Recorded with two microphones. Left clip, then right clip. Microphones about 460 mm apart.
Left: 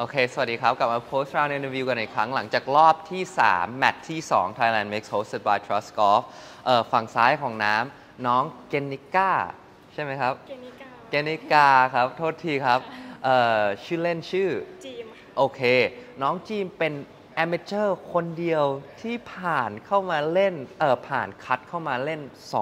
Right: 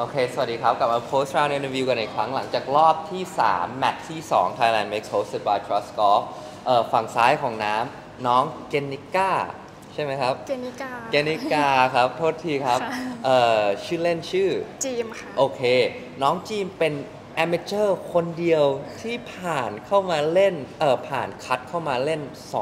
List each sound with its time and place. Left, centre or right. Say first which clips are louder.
0.0 s speech: right 1 dB; left